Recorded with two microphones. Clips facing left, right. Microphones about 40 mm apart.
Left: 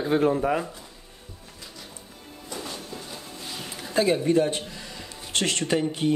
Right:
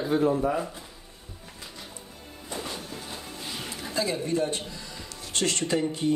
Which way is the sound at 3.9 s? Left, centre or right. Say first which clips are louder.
Left 6 dB; left.